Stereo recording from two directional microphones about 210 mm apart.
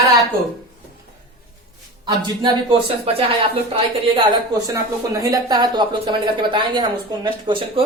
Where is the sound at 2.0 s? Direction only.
20° right (ahead or behind).